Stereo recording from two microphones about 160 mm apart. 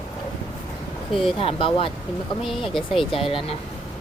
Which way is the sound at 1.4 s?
35° left (ahead or behind).